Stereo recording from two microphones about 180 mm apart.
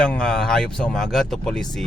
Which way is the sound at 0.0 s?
5° left (ahead or behind).